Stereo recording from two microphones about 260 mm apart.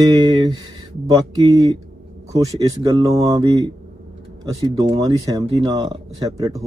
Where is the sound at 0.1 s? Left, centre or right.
Centre.